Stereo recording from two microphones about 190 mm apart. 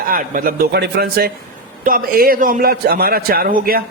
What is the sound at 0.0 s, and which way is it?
A man's voice, 45° right (ahead or behind).